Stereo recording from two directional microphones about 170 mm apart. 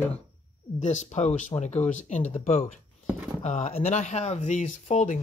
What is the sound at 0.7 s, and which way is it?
Speech, 45° left (ahead or behind).